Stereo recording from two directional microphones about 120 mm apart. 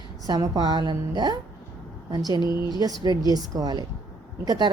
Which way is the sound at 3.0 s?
30° right (ahead or behind).